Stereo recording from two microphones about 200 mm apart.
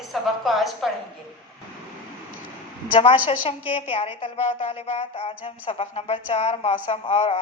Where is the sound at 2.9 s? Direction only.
25° left (ahead or behind).